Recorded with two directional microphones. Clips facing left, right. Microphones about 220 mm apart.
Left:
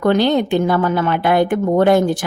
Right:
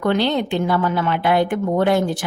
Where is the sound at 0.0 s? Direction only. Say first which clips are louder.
Left 4 dB; 45° left (ahead or behind).